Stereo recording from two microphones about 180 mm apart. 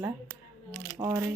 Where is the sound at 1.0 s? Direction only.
20° right (ahead or behind).